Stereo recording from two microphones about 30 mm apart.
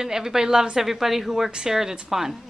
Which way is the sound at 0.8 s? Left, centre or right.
Centre.